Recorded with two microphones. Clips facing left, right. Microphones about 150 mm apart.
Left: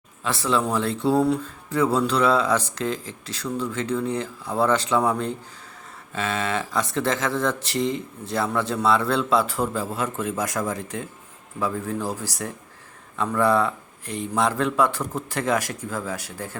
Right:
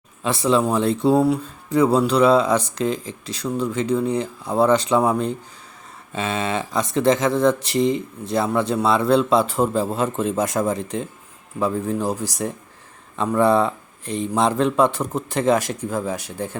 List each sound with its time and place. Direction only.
0.2 s speech: 20° right (ahead or behind)